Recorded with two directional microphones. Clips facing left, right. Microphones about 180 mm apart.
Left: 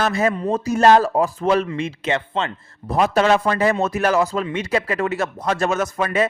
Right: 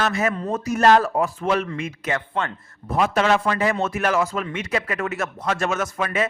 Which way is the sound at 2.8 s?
35° left (ahead or behind).